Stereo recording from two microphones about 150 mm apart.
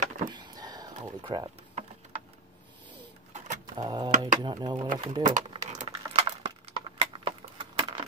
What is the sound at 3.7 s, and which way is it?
Speech, 30° right (ahead or behind).